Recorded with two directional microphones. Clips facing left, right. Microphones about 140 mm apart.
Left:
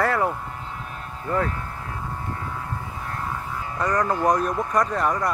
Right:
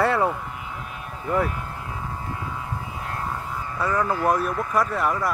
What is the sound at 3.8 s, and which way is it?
Speech, 5° right (ahead or behind).